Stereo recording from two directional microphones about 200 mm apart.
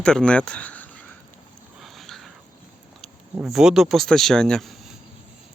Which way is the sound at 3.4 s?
Centre (ahead or behind).